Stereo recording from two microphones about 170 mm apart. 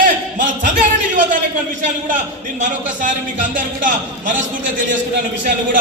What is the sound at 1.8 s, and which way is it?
Speech, 50° right (ahead or behind).